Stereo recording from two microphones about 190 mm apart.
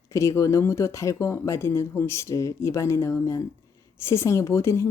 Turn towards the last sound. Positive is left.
turn(degrees=15)  # may be behind; listen again after turning